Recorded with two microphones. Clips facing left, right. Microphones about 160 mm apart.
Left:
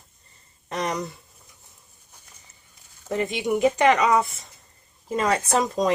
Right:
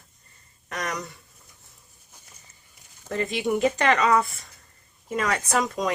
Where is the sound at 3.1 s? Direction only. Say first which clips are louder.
Left 1 dB; 15° left (ahead or behind).